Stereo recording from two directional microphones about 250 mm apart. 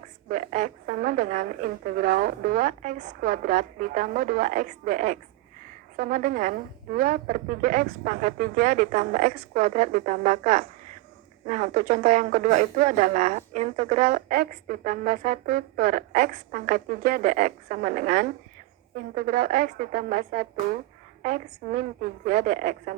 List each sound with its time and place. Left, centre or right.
0.3 s speech: right
18.9 s a woman's voice: right
19.4 s speech: right